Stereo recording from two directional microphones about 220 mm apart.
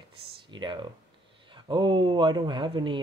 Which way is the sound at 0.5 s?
20° right (ahead or behind).